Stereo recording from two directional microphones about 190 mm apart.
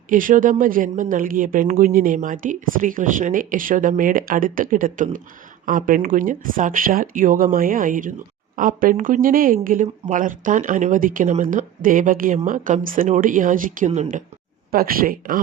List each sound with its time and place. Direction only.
0.1 s speech: 45° right (ahead or behind)
14.7 s speech: 50° right (ahead or behind)